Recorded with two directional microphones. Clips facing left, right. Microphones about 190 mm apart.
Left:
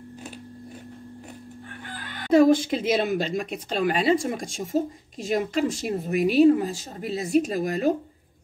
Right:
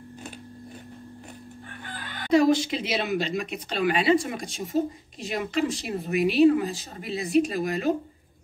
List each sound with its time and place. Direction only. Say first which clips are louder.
2.3 s speech: left 3 dB; 50° left (ahead or behind)